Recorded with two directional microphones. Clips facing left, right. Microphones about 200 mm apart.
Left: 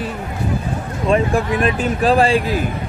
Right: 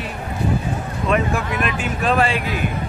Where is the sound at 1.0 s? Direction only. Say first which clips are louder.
Left 4 dB; 30° left (ahead or behind).